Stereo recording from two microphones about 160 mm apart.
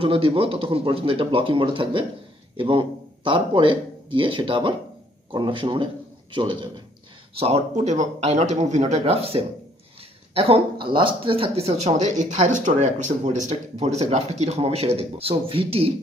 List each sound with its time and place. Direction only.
0.0 s a man's voice: 35° right (ahead or behind)